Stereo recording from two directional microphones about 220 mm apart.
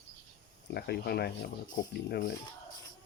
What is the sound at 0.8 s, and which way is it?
Speech, 45° left (ahead or behind).